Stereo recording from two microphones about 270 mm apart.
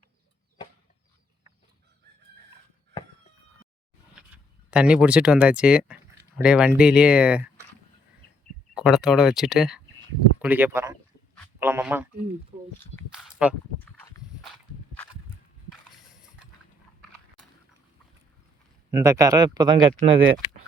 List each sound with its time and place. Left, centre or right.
4.7 s speech: centre
8.7 s speech: centre
13.1 s speech: centre
18.9 s speech: centre